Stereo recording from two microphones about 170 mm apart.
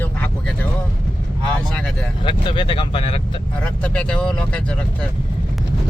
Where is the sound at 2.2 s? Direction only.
30° left (ahead or behind).